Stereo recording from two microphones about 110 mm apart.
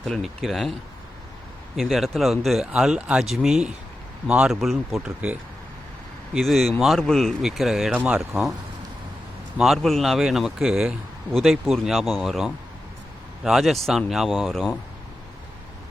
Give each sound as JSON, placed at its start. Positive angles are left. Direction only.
{"t": 0.0, "sound": "speech", "side_deg": 0}
{"t": 1.7, "sound": "speech", "side_deg": 0}
{"t": 6.3, "sound": "speech", "side_deg": 0}
{"t": 9.6, "sound": "speech", "side_deg": 0}